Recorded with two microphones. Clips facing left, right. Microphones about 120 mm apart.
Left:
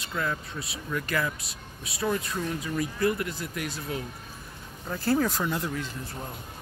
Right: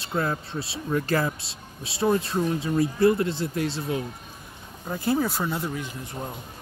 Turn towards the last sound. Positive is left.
turn(degrees=-15)  # may be behind; listen again after turning